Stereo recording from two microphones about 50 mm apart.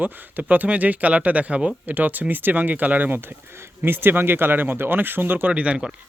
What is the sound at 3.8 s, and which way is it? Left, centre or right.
Speech, right.